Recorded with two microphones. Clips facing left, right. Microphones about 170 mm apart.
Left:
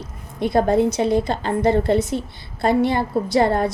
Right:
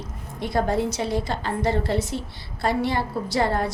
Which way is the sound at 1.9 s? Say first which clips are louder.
Left 6 dB; 20° left (ahead or behind).